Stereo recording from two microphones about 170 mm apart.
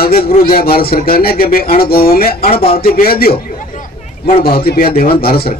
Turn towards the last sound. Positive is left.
turn(degrees=65)  # may be behind; listen again after turning